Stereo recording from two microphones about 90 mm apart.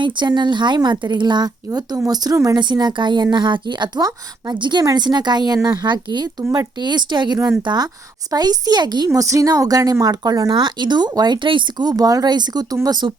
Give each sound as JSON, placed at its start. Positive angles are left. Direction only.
{"t": 0.0, "sound": "a woman's voice", "side_deg": -55}
{"t": 2.3, "sound": "speech", "side_deg": -35}
{"t": 2.6, "sound": "a woman's voice", "side_deg": -55}
{"t": 9.1, "sound": "speech", "side_deg": -40}
{"t": 10.5, "sound": "a woman's voice", "side_deg": -60}